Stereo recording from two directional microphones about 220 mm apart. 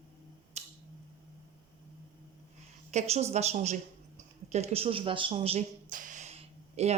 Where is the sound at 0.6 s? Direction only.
30° right (ahead or behind).